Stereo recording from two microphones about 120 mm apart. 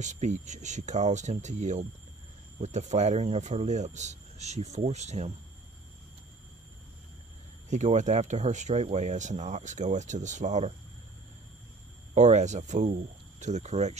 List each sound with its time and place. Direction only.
0.0 s speech: 80° right
7.7 s speech: 80° right
12.1 s speech: 75° right (ahead or behind)